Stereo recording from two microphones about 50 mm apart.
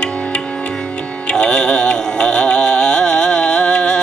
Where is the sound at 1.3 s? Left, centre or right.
Centre.